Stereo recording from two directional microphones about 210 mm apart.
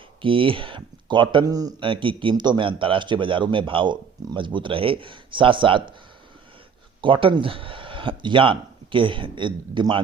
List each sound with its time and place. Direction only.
0.2 s speech: 25° right (ahead or behind)
7.0 s speech: 25° right (ahead or behind)